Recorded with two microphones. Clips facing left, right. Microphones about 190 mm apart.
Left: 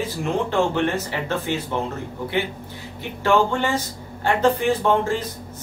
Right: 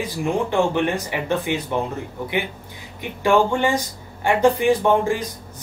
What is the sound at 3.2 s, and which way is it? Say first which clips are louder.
Speech: right 2 dB; 15° right (ahead or behind).